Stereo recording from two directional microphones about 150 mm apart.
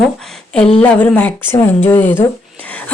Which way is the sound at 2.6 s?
10° left (ahead or behind).